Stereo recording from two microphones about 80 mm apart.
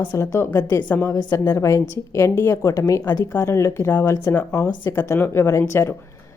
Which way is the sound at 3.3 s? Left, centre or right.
Left.